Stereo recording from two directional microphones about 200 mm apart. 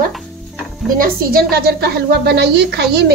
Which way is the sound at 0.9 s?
45° right (ahead or behind).